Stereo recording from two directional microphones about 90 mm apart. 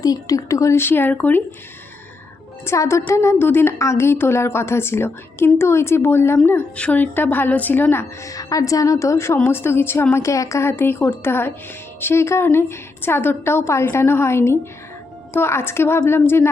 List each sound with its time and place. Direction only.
0.0 s a woman's voice: 45° left (ahead or behind); by 1.4 s 20° left (ahead or behind)
2.6 s a woman's voice: 30° left (ahead or behind)
8.2 s a woman's voice: 40° left (ahead or behind)